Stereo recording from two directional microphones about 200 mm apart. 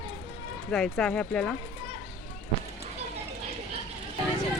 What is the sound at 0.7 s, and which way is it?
Speech, 5° left (ahead or behind).